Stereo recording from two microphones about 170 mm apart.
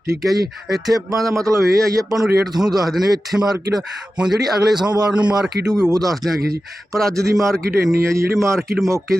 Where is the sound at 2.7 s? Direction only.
Centre (ahead or behind).